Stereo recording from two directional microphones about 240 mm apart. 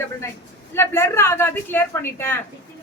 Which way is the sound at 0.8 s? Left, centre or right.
Centre.